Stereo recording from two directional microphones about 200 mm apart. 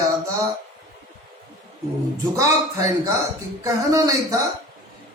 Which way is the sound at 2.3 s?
15° right (ahead or behind).